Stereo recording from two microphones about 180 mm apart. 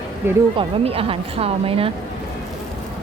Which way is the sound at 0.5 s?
30° right (ahead or behind).